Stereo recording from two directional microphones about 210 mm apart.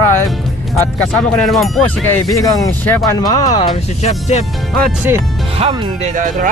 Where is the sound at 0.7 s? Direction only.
5° left (ahead or behind).